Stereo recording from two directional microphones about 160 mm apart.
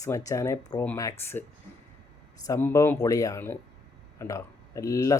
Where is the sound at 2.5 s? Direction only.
15° left (ahead or behind).